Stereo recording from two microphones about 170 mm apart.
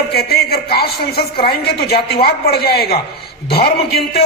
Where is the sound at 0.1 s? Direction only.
65° left (ahead or behind).